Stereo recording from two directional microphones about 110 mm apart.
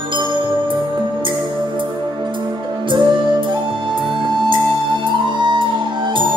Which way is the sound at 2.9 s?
45° right (ahead or behind).